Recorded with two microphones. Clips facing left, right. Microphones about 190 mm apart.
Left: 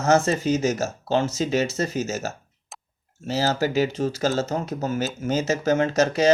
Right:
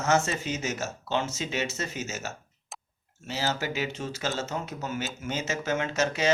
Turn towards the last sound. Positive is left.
turn(degrees=40)  # may be behind; listen again after turning